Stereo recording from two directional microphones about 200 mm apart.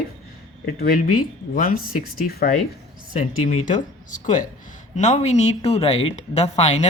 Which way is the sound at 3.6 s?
40° left (ahead or behind).